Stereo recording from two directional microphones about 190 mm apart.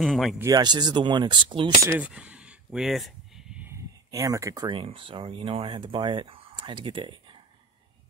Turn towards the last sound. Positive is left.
turn(degrees=-25)  # may be behind; listen again after turning